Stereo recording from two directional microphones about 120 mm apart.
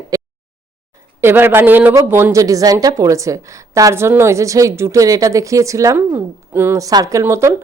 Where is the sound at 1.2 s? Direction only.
20° right (ahead or behind).